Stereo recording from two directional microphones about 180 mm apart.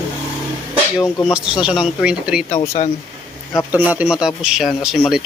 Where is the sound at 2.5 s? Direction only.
35° left (ahead or behind).